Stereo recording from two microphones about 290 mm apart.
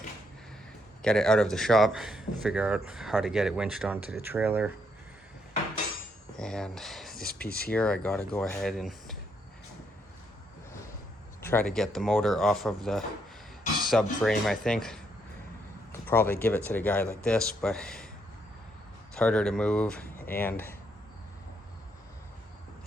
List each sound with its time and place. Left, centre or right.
1.0 s speech: centre
6.3 s speech: centre
7.2 s speech: left
7.7 s speech: centre
11.4 s speech: centre
19.1 s speech: centre